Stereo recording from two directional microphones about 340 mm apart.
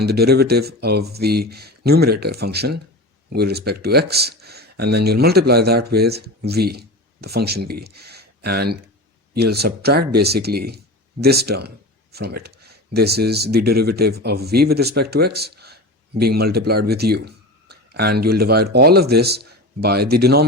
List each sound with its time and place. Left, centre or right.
0.0 s speech: right